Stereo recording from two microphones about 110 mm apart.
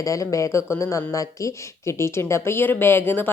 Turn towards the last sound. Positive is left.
turn(degrees=20)  # may be behind; listen again after turning